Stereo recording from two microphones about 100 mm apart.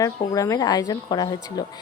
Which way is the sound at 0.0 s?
35° left (ahead or behind).